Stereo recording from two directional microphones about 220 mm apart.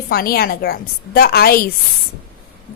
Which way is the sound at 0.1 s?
45° left (ahead or behind).